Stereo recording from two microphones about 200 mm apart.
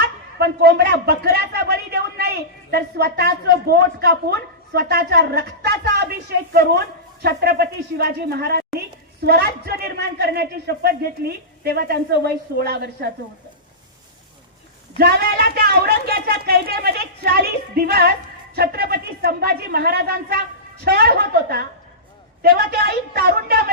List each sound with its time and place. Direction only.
0.3 s speech: 55° right (ahead or behind)
14.9 s speech: 50° right (ahead or behind)